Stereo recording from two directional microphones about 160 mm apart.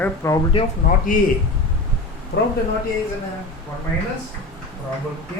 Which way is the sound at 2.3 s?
90° left.